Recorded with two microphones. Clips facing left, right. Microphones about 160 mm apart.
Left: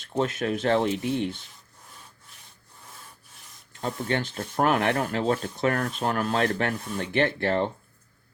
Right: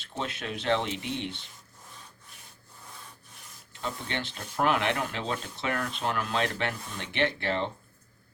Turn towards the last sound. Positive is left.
turn(degrees=50)  # may be behind; listen again after turning